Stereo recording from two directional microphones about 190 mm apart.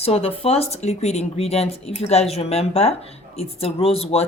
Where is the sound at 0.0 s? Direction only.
30° left (ahead or behind).